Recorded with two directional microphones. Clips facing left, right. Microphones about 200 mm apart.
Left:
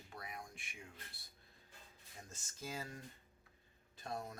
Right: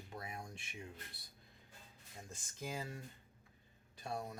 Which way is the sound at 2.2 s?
15° right (ahead or behind).